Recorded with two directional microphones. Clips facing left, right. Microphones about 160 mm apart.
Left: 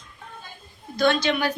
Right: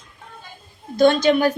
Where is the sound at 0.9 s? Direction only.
45° right (ahead or behind).